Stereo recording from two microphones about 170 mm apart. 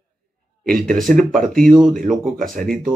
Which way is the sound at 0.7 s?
Centre (ahead or behind).